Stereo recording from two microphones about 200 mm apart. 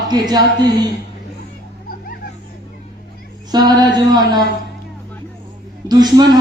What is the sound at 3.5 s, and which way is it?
Speech, 20° right (ahead or behind).